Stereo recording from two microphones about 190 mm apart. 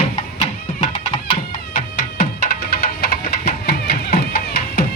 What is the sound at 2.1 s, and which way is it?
Music, 50° left (ahead or behind).